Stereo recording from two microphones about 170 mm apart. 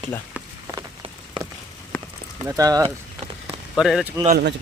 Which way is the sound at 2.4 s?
20° right (ahead or behind).